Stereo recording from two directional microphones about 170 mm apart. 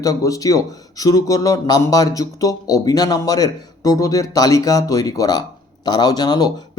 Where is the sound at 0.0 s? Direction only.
20° left (ahead or behind).